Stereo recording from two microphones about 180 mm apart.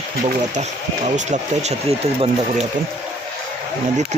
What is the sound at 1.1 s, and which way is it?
Speech, 40° right (ahead or behind).